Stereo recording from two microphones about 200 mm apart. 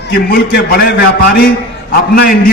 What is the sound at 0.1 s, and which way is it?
A man's voice, 50° left (ahead or behind).